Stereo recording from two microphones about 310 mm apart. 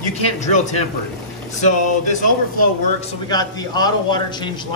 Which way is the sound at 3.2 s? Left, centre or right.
Centre.